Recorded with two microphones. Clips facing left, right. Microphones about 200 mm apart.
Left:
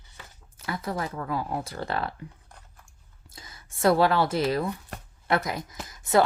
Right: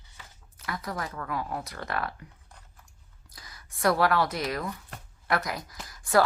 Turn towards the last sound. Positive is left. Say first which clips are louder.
# left 2 dB
turn(degrees=20)  # may be behind; listen again after turning